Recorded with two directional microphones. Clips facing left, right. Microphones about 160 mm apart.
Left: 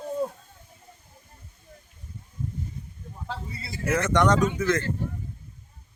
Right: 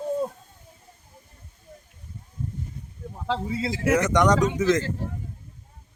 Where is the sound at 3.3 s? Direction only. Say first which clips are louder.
Right 11 dB; 90° right.